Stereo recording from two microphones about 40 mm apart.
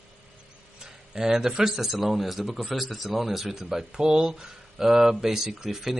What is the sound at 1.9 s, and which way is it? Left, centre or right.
Speech, centre.